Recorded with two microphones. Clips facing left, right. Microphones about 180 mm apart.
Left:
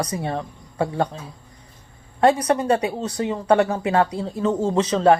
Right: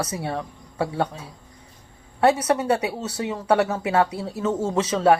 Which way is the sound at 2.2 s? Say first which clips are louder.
Left 2 dB; 5° right (ahead or behind).